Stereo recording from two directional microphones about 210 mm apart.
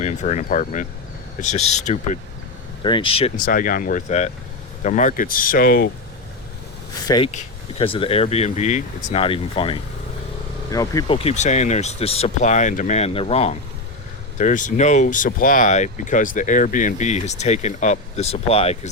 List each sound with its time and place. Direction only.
0.0 s speech: 35° left (ahead or behind)
3.4 s speech: 40° left (ahead or behind)
7.3 s speech: 30° left (ahead or behind)
11.2 s speech: 30° left (ahead or behind)